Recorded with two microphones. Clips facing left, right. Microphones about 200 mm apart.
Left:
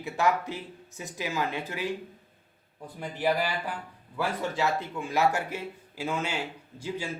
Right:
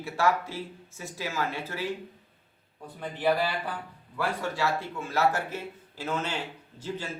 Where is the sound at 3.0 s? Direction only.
15° left (ahead or behind).